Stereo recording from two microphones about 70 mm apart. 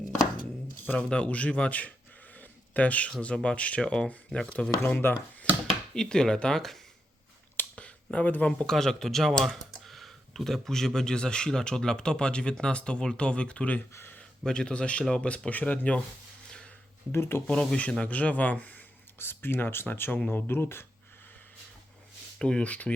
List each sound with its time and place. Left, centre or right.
0.9 s speech: centre
4.9 s speech: left
5.9 s speech: centre
7.5 s a sound: left
8.6 s speech: centre
13.9 s speech: left
14.2 s speech: centre
17.1 s speech: left
17.4 s speech: centre; by 20.8 s left
22.4 s speech: centre